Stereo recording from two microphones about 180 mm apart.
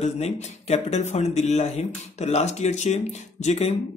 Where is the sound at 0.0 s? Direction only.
35° left (ahead or behind).